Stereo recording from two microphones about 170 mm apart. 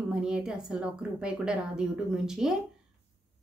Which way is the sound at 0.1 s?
5° right (ahead or behind).